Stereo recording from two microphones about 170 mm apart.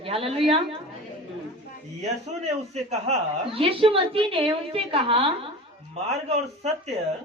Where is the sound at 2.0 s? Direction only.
40° right (ahead or behind).